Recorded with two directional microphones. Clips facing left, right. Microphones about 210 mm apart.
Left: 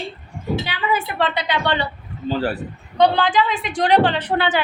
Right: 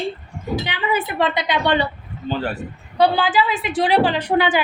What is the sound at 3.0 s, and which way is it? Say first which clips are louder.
A woman's voice: left 1 dB; 5° right (ahead or behind).